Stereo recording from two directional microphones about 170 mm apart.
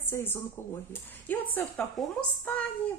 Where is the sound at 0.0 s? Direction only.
15° left (ahead or behind).